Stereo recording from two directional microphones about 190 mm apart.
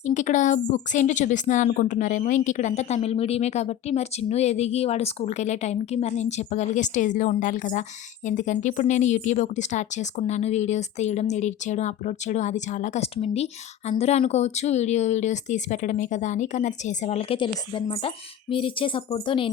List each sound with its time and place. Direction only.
0.0 s a woman's voice: 40° left (ahead or behind)